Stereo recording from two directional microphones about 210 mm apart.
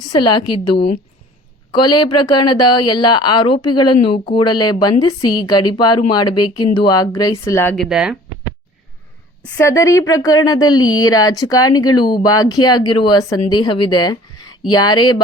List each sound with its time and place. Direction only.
0.0 s a woman's voice: 20° left (ahead or behind)
7.9 s speech: 5° right (ahead or behind)
9.4 s speech: 15° left (ahead or behind)
10.8 s speech: 80° left
11.0 s a woman's voice: 20° left (ahead or behind)